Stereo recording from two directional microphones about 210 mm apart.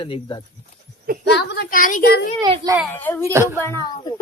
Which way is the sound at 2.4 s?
20° right (ahead or behind).